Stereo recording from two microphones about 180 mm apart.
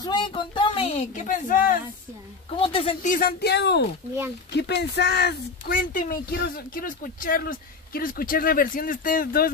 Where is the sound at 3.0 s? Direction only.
50° left (ahead or behind); by 5.3 s 65° left (ahead or behind).